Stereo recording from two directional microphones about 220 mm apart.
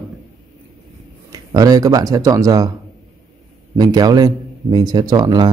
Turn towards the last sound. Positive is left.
turn(degrees=-20)  # may be behind; listen again after turning